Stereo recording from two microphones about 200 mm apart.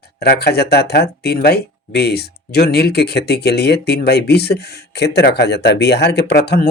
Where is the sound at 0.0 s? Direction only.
55° left (ahead or behind).